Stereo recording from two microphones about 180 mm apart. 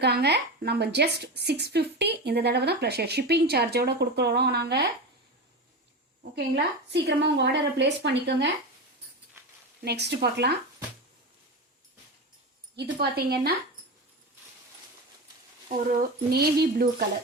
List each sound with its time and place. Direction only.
0.0 s speech: 65° right (ahead or behind)
6.9 s a woman's voice: 70° right (ahead or behind)
9.8 s a woman's voice: 65° right (ahead or behind)
12.7 s speech: 65° right (ahead or behind)
15.7 s speech: 55° right (ahead or behind)